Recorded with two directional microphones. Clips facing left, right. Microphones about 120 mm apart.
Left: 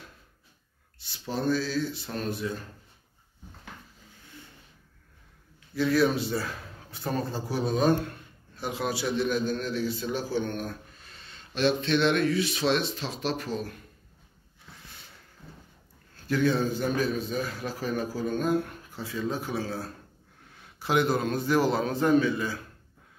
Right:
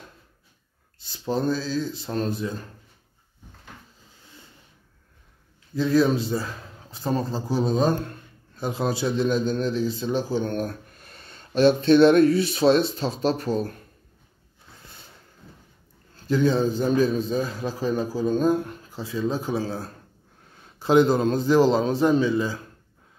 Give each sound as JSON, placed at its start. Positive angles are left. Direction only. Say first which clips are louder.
{"t": 1.1, "sound": "a man's voice", "louder": "right 3 dB", "side_deg": -25}
{"t": 5.8, "sound": "a man's voice", "louder": "right 4 dB", "side_deg": -25}
{"t": 16.3, "sound": "a man's voice", "louder": "right 4 dB", "side_deg": -25}
{"t": 20.8, "sound": "a man's voice", "louder": "right 7 dB", "side_deg": -25}